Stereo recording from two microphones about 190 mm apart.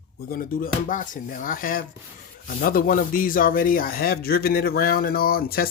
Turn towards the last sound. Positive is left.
turn(degrees=50)  # may be behind; listen again after turning